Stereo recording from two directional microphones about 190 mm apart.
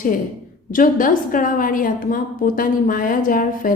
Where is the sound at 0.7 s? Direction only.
45° left (ahead or behind).